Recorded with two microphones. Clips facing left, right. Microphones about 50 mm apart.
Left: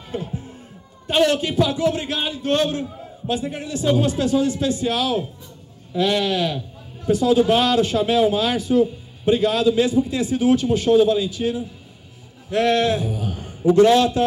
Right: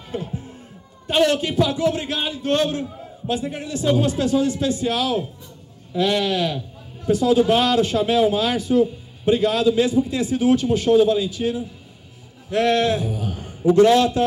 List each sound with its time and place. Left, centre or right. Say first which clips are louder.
1.0 s a man's voice: even; left